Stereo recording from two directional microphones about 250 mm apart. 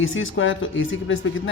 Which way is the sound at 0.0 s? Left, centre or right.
Left.